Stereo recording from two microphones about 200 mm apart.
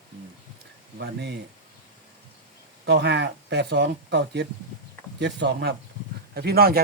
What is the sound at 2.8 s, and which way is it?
Speech, 55° right (ahead or behind).